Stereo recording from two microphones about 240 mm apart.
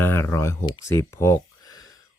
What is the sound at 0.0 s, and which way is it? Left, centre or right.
Speech, centre.